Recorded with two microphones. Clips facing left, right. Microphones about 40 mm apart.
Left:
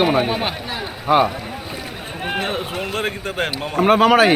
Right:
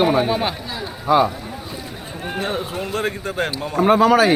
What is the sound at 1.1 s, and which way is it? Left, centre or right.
Speech, left.